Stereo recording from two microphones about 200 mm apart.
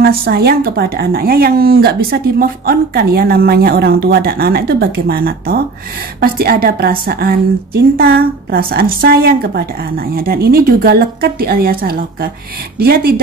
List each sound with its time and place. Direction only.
0.2 s speech: 50° right (ahead or behind)